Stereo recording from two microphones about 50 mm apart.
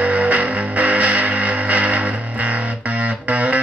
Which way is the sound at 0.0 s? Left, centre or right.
Right.